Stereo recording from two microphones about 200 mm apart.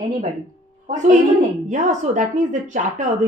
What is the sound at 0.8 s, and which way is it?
Speech, 40° right (ahead or behind).